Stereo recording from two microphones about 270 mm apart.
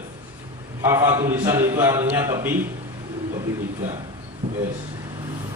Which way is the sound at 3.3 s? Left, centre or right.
Centre.